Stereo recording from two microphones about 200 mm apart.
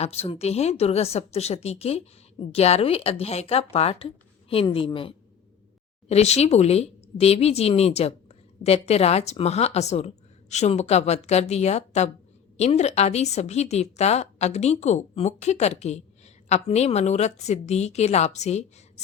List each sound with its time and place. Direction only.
0.0 s a woman's voice: 30° left (ahead or behind)